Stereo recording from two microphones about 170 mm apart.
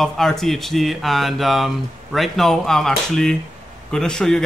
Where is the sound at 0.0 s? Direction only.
Centre (ahead or behind).